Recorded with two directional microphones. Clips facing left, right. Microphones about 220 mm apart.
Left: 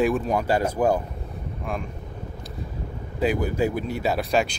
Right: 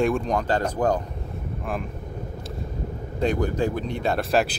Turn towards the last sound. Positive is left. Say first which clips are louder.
# right 1 dB
turn(degrees=0)  # may be behind; listen again after turning